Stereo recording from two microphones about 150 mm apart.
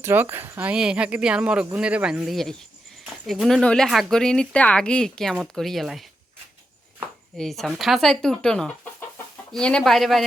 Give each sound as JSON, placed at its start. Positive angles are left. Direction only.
{"t": 0.0, "sound": "speech", "side_deg": -15}
{"t": 7.3, "sound": "speech", "side_deg": 0}